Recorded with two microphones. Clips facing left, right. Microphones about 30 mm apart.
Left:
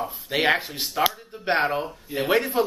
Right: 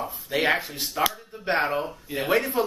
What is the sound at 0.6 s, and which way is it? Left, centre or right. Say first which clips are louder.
Speech: left 1 dB; left.